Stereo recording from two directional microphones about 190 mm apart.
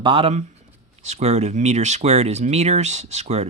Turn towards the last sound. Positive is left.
turn(degrees=-35)  # may be behind; listen again after turning